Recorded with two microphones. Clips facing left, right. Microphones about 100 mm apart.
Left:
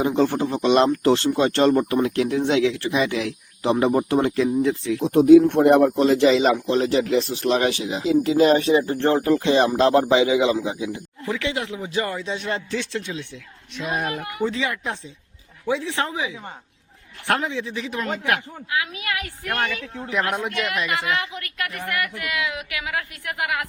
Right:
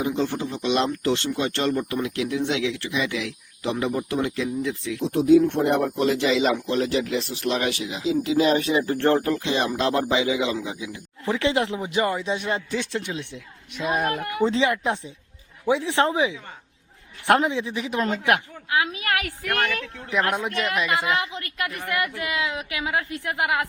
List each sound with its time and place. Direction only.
0.0 s speech: 55° left (ahead or behind)
6.0 s a man's voice: 35° left (ahead or behind)
6.9 s a man's voice: 40° left (ahead or behind)
8.0 s a man's voice: 50° left (ahead or behind); by 9.0 s 30° left (ahead or behind)
9.0 s speech: 20° left (ahead or behind)
9.3 s a man's voice: 35° left (ahead or behind)
11.3 s speech: 30° right (ahead or behind)
13.8 s speech: centre (ahead or behind)
14.4 s a woman's voice: 25° right (ahead or behind)
19.5 s speech: centre (ahead or behind)
20.9 s a woman's voice: 25° right (ahead or behind)